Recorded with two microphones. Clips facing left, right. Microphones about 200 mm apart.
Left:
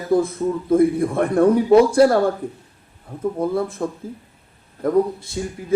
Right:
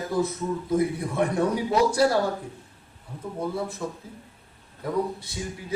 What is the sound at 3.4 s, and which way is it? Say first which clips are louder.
Speech: left 6 dB; 55° left (ahead or behind).